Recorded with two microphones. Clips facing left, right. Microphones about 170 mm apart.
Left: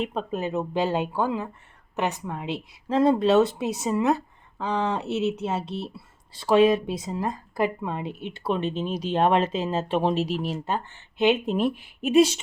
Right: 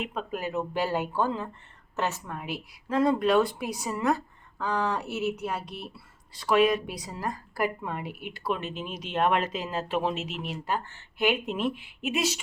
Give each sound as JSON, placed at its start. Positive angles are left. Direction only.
{"t": 0.0, "sound": "speech", "side_deg": 30}